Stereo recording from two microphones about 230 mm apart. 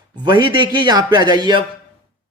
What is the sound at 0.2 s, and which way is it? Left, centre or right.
Speech, centre.